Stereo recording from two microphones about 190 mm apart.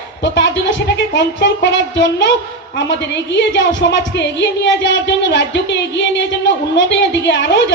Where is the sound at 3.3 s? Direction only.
70° left (ahead or behind).